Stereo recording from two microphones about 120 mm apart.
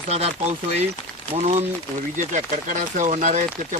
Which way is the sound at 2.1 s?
90° right.